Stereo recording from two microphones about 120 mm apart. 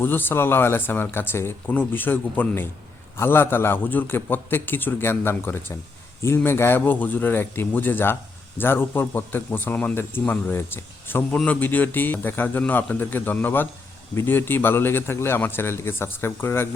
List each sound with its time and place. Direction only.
0.0 s a man's voice: 15° left (ahead or behind)